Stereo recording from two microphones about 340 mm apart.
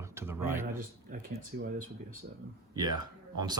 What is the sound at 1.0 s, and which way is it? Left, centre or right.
Speech, right.